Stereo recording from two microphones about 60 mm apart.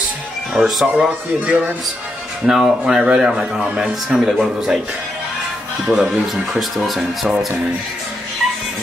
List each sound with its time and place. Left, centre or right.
0.6 s speech: centre
0.9 s speech: centre
5.9 s speech: centre